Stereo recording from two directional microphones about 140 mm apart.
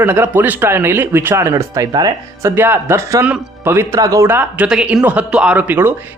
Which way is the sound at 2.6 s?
15° right (ahead or behind).